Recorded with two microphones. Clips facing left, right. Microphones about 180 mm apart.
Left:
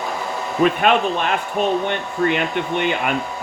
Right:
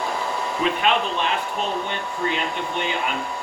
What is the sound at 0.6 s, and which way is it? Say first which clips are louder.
Speech: left 6 dB; 55° left (ahead or behind).